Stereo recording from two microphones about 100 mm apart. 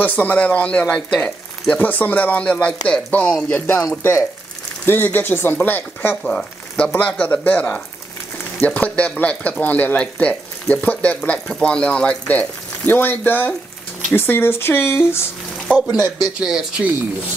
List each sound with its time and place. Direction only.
0.0 s speech: 15° left (ahead or behind)
15.7 s speech: 10° left (ahead or behind)
16.3 s speech: 5° right (ahead or behind)